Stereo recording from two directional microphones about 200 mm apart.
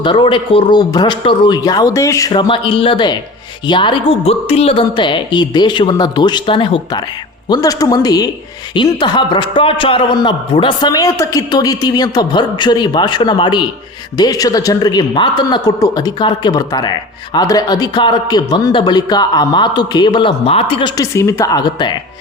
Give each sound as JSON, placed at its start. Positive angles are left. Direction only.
{"t": 0.0, "sound": "a man's voice", "side_deg": 25}